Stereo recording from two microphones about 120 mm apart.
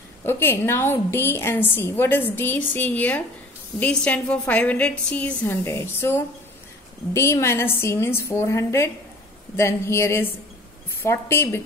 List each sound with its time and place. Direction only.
0.2 s a woman's voice: 20° left (ahead or behind)